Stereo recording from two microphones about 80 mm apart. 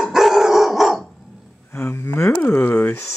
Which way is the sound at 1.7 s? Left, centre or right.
Left.